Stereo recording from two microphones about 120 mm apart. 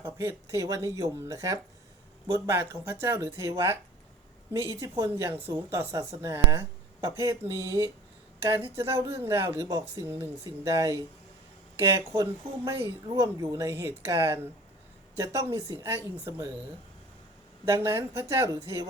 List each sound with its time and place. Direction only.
0.0 s speech: 20° right (ahead or behind)
11.9 s speech: 25° right (ahead or behind)
17.7 s speech: 20° right (ahead or behind)